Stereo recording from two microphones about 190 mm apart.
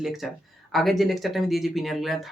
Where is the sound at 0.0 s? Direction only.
Centre (ahead or behind).